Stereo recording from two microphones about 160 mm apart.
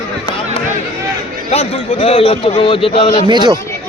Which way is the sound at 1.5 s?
35° left (ahead or behind).